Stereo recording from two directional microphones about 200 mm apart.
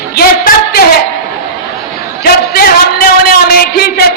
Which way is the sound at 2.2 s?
50° left (ahead or behind).